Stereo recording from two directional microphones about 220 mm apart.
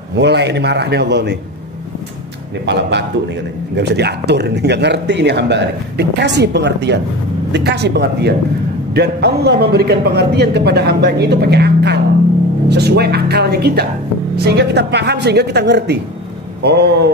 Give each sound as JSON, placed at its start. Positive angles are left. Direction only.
{"t": 0.1, "sound": "speech", "side_deg": -50}
{"t": 2.6, "sound": "speech", "side_deg": -50}